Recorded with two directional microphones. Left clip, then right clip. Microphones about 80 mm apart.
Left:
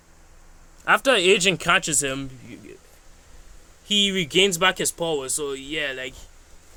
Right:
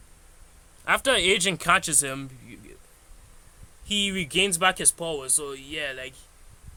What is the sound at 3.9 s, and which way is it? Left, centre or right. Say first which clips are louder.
Speech: left 5 dB; left.